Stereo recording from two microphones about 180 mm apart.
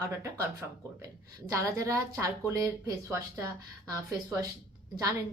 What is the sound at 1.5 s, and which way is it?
A woman's voice, 15° right (ahead or behind).